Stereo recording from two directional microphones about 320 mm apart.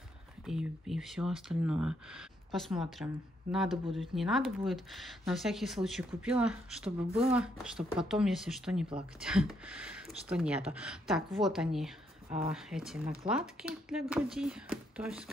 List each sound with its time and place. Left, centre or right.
0.5 s speech: centre
7.1 s speech: centre
7.6 s speech: centre